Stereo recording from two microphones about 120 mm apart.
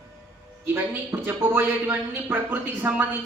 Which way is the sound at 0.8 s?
20° right (ahead or behind).